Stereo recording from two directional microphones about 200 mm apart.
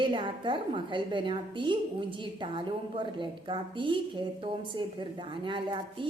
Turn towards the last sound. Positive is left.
turn(degrees=-25)  # may be behind; listen again after turning